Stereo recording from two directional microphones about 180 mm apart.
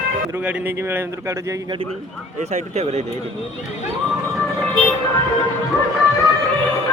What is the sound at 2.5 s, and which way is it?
Speech, 35° right (ahead or behind).